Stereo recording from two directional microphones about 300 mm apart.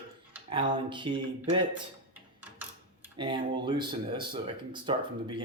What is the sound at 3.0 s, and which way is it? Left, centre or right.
Speech, centre.